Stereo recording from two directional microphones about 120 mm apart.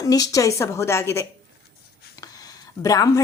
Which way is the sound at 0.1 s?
30° left (ahead or behind).